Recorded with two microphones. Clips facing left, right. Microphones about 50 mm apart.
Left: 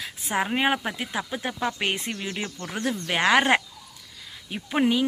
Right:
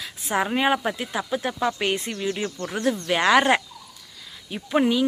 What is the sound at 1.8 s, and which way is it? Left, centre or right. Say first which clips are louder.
Speech: right 3 dB; left.